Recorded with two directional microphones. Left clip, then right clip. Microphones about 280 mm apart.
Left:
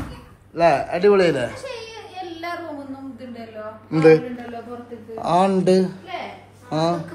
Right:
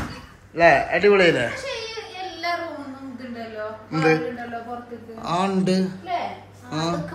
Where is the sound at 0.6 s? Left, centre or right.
Centre.